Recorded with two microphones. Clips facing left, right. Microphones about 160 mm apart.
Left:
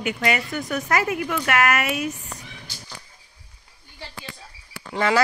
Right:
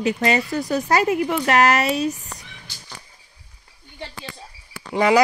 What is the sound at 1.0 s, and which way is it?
A woman's voice, 20° right (ahead or behind).